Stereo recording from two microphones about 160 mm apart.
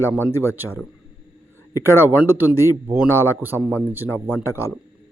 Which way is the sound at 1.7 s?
15° left (ahead or behind).